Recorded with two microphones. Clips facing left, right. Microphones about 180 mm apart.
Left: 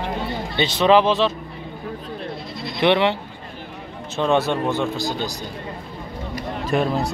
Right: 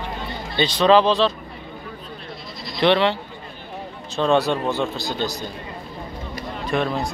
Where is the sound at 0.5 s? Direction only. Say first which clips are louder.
Even; 20° left (ahead or behind).